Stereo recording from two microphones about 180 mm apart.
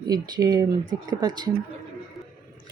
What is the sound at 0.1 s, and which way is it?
A woman's voice, 20° right (ahead or behind).